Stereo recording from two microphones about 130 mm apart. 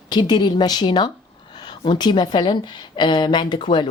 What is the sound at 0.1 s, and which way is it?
A woman's voice, 35° left (ahead or behind).